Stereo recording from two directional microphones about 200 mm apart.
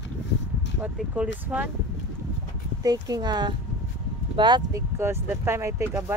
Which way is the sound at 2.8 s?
20° right (ahead or behind).